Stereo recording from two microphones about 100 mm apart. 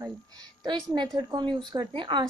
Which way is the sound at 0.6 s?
50° right (ahead or behind).